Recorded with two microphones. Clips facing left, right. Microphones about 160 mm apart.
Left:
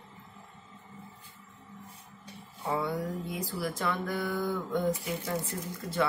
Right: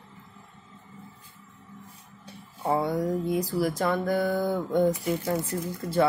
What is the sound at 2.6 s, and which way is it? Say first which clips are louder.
A woman's voice: right 6 dB; 40° right (ahead or behind).